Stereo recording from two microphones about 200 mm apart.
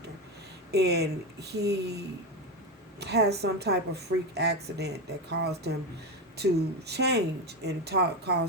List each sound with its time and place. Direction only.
0.7 s speech: 55° right (ahead or behind)
3.0 s speech: 55° right (ahead or behind)